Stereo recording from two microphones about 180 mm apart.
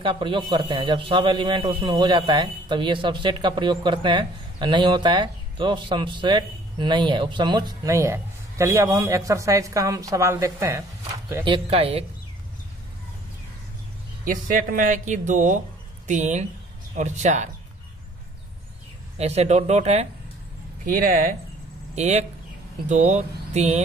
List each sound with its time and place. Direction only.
0.0 s a man's voice: 30° right (ahead or behind)
11.4 s speech: 30° right (ahead or behind)
14.2 s speech: 50° right (ahead or behind)
19.1 s speech: 35° right (ahead or behind)
20.8 s speech: 50° right (ahead or behind)
21.9 s speech: 40° right (ahead or behind)